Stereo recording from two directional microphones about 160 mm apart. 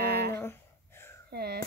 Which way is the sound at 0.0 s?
90° right.